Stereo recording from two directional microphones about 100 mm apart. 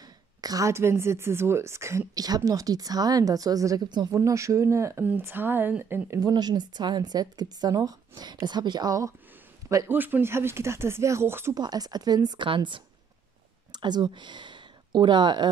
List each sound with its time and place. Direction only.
0.4 s a woman's voice: 40° right (ahead or behind)
4.1 s speech: 30° right (ahead or behind)
6.1 s speech: 40° right (ahead or behind)
9.8 s speech: 20° right (ahead or behind)
11.5 s speech: 40° right (ahead or behind)